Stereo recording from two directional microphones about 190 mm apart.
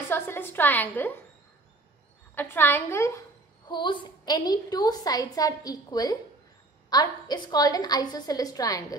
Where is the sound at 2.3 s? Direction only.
10° left (ahead or behind).